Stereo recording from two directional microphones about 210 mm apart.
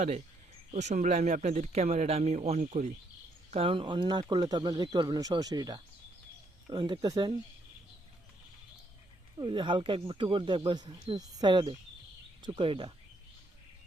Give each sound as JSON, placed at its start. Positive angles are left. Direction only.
{"t": 0.7, "sound": "speech", "side_deg": -35}
{"t": 9.4, "sound": "speech", "side_deg": -20}